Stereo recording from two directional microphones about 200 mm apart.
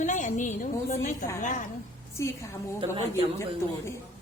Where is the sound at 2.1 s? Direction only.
15° left (ahead or behind).